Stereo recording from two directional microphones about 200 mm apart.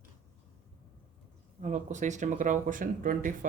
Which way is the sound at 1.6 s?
40° right (ahead or behind).